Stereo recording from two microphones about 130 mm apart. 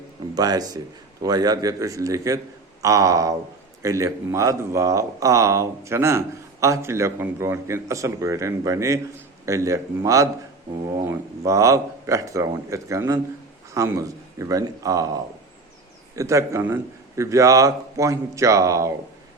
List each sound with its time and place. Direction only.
0.3 s a man's voice: 30° right (ahead or behind)
16.1 s a man's voice: 25° right (ahead or behind)